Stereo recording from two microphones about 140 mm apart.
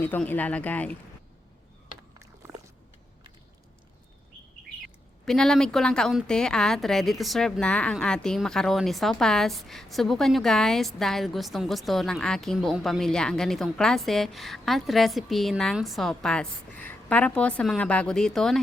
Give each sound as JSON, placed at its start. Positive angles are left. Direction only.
{"t": 0.0, "sound": "speech", "side_deg": 15}
{"t": 2.1, "sound": "biting", "side_deg": -20}
{"t": 5.2, "sound": "a woman's voice", "side_deg": 5}